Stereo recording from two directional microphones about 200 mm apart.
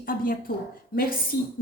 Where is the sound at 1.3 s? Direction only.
15° left (ahead or behind).